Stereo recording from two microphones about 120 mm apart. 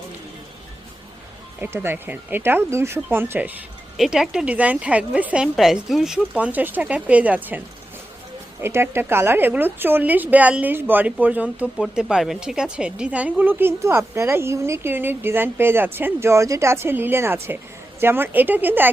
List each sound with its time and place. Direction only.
1.6 s speech: 20° right (ahead or behind)
3.9 s speech: 5° right (ahead or behind)
8.6 s speech: 20° right (ahead or behind)